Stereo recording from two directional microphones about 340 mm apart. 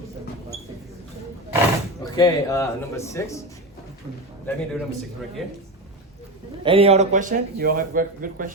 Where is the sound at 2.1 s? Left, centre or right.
Centre.